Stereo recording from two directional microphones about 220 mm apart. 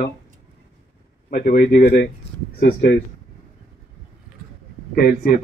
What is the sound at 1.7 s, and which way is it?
Speech, 45° left (ahead or behind).